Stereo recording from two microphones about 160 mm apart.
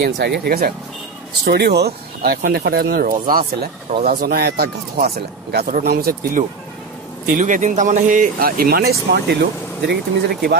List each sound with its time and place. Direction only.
0.0 s speech: 90° right; by 0.7 s 70° right (ahead or behind)
1.4 s speech: 90° right; by 6.4 s 70° right (ahead or behind)
7.3 s speech: 55° right (ahead or behind); by 10.5 s 90° right